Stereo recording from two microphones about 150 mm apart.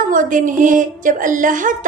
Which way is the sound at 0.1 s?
60° right (ahead or behind).